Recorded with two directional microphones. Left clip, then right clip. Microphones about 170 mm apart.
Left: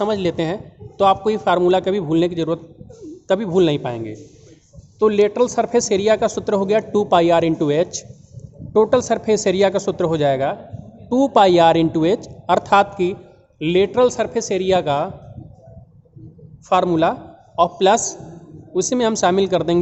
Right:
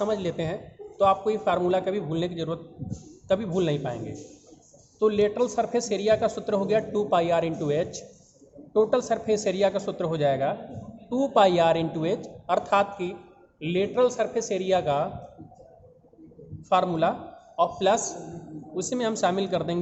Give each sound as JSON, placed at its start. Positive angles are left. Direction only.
{"t": 0.0, "sound": "a man's voice", "side_deg": 70}
{"t": 16.6, "sound": "a man's voice", "side_deg": 60}